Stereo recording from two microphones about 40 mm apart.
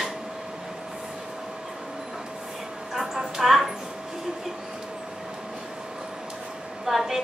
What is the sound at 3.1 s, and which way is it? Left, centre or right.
Speech, centre.